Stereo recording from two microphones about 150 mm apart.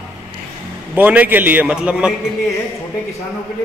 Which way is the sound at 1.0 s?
10° right (ahead or behind).